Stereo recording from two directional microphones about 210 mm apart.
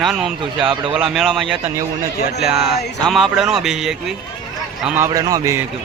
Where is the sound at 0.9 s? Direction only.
Centre (ahead or behind).